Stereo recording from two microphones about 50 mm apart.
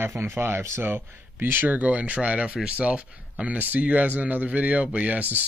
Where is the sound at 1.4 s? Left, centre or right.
Right.